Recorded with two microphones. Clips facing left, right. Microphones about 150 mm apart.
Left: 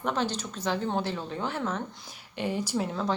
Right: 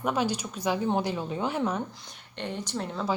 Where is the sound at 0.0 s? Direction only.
10° right (ahead or behind).